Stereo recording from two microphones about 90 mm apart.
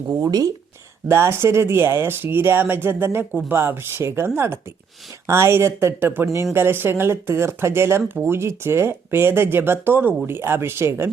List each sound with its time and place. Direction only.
0.1 s speech: 40° right (ahead or behind)
1.0 s speech: 30° right (ahead or behind)